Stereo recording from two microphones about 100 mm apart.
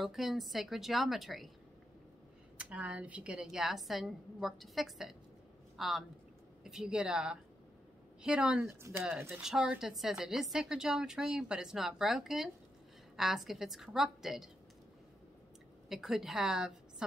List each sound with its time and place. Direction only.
0.0 s a woman's voice: centre (ahead or behind)
2.5 s a woman's voice: 10° right (ahead or behind)
8.6 s speech: 25° right (ahead or behind)
9.4 s a woman's voice: 10° right (ahead or behind)
15.9 s a woman's voice: 5° right (ahead or behind)